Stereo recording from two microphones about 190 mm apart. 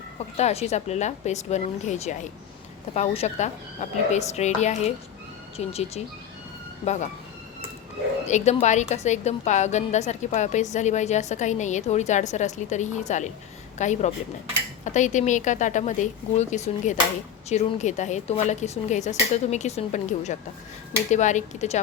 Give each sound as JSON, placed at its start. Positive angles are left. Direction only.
{"t": 0.3, "sound": "a woman's voice", "side_deg": 35}
{"t": 8.2, "sound": "a woman's voice", "side_deg": 35}